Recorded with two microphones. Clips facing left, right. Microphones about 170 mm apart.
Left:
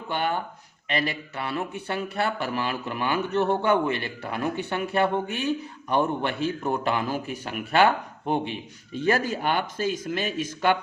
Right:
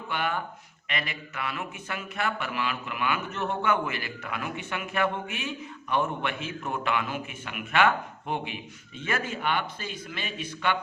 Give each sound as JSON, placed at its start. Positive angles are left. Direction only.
{"t": 0.1, "sound": "a man's voice", "side_deg": 30}